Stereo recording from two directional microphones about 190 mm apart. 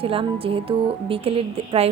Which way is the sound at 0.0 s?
30° right (ahead or behind).